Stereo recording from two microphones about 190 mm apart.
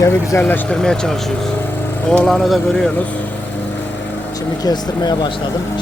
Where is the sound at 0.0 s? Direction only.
15° left (ahead or behind).